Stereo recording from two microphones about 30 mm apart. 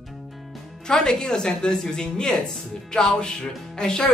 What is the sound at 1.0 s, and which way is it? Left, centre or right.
A woman's voice, left.